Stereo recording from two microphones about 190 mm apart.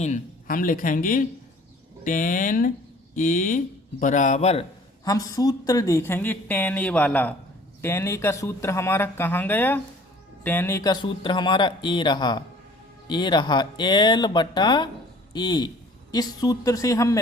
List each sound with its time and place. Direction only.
0.0 s a man's voice: 45° left (ahead or behind)
5.0 s speech: 20° left (ahead or behind)